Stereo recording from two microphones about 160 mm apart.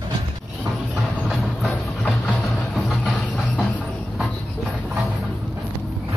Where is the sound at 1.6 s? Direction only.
5° left (ahead or behind).